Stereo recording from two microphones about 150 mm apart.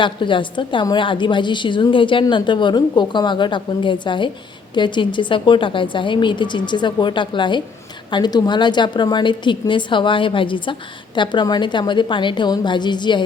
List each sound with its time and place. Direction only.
0.0 s a woman's voice: 35° left (ahead or behind)